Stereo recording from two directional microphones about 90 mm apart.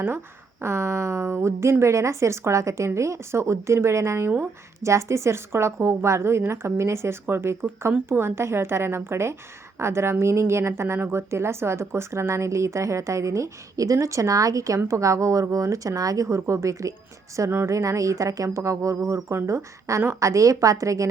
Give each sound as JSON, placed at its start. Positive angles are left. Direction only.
{"t": 0.6, "sound": "a woman's voice", "side_deg": -30}